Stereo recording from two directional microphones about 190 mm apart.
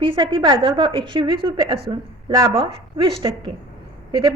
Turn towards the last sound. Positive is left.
turn(degrees=-25)  # may be behind; listen again after turning